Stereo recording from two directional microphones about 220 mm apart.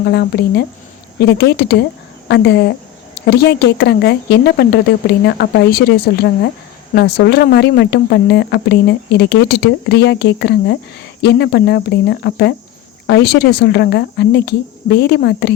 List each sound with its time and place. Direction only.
0.0 s speech: 45° left (ahead or behind)